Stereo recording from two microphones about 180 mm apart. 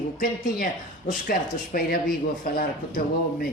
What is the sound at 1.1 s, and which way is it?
Speech, 50° left (ahead or behind).